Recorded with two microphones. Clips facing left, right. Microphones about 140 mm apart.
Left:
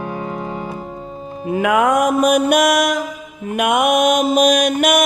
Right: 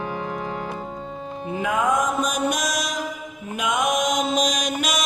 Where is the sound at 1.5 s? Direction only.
75° left (ahead or behind).